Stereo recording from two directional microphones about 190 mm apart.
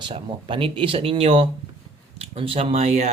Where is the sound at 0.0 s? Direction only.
25° right (ahead or behind).